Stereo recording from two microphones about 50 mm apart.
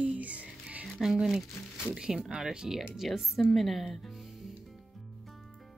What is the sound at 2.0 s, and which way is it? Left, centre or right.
Speech, centre.